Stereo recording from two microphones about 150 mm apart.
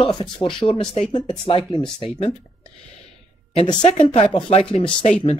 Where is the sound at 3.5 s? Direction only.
40° left (ahead or behind).